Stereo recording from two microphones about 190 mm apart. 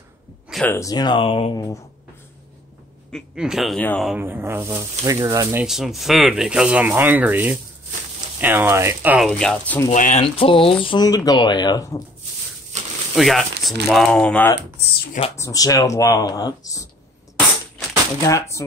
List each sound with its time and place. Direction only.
0.7 s speech: 15° left (ahead or behind)
3.1 s speech: centre (ahead or behind)
4.2 s speech: 10° right (ahead or behind)
5.6 s speech: centre (ahead or behind)
9.3 s speech: 5° left (ahead or behind)
9.9 s speech: 40° left (ahead or behind)
10.2 s speech: 30° left (ahead or behind)
12.7 s a sound: 40° right (ahead or behind)
13.1 s speech: centre (ahead or behind)
15.3 s speech: 15° left (ahead or behind)
18.2 s speech: 15° left (ahead or behind)